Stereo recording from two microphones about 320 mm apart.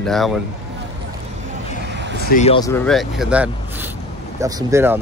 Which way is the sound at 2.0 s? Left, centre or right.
Right.